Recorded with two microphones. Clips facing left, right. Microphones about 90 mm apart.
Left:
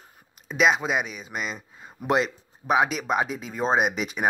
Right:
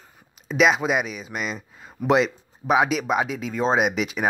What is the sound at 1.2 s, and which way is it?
Speech, 25° left (ahead or behind).